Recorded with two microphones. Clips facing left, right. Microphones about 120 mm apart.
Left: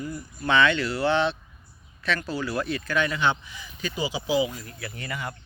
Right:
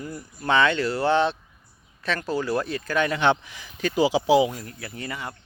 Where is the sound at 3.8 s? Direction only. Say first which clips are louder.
Right 8 dB; 85° right; by 4.6 s 65° right (ahead or behind).